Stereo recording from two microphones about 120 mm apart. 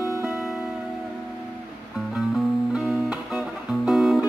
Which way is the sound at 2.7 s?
10° right (ahead or behind).